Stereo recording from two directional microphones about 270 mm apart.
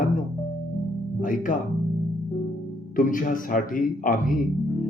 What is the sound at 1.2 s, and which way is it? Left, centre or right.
Speech, left.